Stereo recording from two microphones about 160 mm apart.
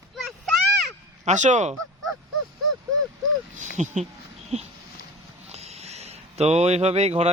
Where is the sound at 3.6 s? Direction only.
50° right (ahead or behind).